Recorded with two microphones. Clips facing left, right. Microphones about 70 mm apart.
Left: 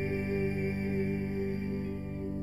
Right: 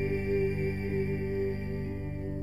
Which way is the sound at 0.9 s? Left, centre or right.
Right.